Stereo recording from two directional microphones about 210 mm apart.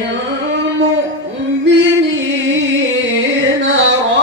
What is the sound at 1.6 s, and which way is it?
Music, 60° right (ahead or behind).